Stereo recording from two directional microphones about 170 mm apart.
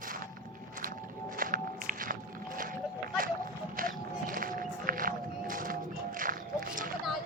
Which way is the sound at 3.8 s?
55° right (ahead or behind).